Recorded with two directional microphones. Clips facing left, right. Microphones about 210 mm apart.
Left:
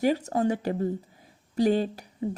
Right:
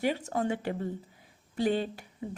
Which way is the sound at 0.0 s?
40° left (ahead or behind).